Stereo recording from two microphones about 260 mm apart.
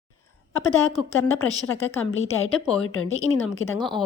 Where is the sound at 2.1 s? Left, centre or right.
Left.